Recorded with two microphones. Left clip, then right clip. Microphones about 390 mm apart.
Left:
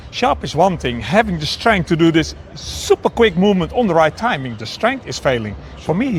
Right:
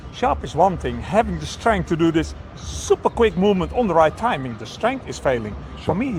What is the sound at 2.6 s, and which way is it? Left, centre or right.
Speech, left.